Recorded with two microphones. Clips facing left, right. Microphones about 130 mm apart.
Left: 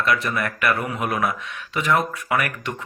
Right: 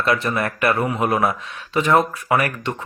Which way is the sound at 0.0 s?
30° right (ahead or behind).